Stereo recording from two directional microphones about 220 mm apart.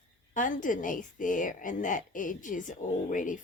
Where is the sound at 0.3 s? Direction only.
35° left (ahead or behind).